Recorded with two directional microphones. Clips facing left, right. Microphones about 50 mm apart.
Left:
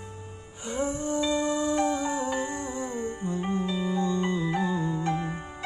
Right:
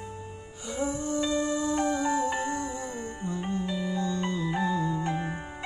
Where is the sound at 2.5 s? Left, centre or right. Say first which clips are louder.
Left 1 dB; left.